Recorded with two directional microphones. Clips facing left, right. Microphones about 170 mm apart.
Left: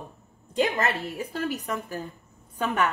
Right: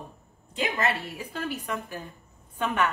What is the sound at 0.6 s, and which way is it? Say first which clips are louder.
A woman's voice: left 3 dB; 45° left (ahead or behind).